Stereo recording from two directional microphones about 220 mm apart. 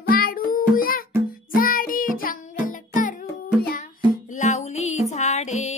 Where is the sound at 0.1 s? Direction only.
40° left (ahead or behind).